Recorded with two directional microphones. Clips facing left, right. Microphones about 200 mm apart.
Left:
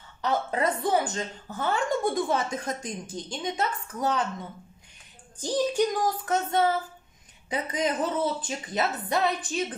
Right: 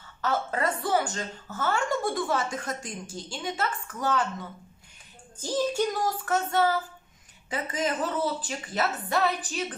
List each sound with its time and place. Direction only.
0.2 s a woman's voice: 15° left (ahead or behind)
5.4 s child singing: 15° left (ahead or behind)
7.4 s a woman's voice: 20° left (ahead or behind)